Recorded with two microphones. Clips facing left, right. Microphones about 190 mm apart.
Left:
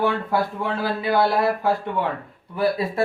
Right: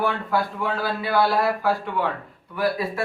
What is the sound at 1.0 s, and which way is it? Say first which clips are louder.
Speech: left 1 dB; 20° left (ahead or behind).